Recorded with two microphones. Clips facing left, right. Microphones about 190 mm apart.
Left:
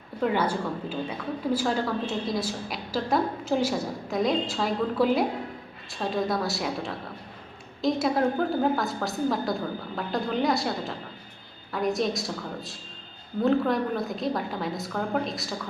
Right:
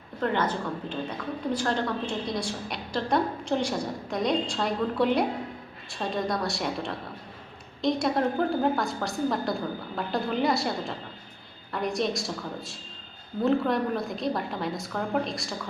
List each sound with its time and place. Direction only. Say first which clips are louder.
0.2 s a woman's voice: left 2 dB; 10° left (ahead or behind)